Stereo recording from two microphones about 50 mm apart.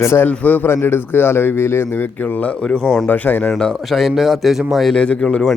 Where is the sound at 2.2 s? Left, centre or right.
Left.